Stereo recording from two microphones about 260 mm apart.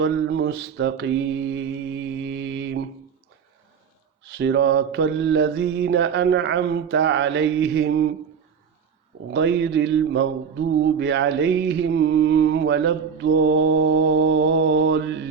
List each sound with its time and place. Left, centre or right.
0.0 s mantra: right
4.4 s mantra: right
9.3 s mantra: right